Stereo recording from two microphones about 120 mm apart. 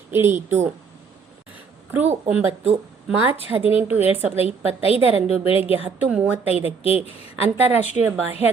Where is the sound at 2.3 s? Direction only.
10° right (ahead or behind).